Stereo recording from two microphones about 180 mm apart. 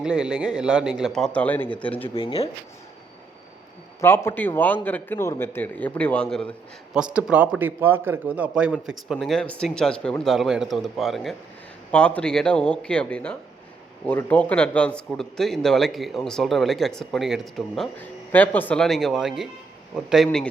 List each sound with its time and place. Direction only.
0.0 s a man's voice: 5° right (ahead or behind)
2.0 s speech: 30° left (ahead or behind)
4.0 s a man's voice: 15° left (ahead or behind)
6.9 s a man's voice: 5° right (ahead or behind)